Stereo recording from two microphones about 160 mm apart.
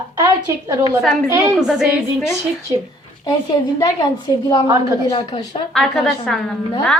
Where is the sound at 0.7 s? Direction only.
20° right (ahead or behind).